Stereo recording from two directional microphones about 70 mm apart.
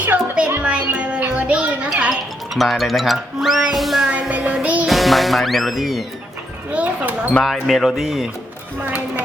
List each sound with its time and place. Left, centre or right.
0.0 s music: centre
2.6 s speech: centre
4.3 s music: centre
4.9 s music: centre
6.7 s speech: right
7.4 s speech: centre
8.8 s speech: right